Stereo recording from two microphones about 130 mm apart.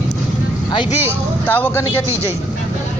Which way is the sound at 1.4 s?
15° left (ahead or behind).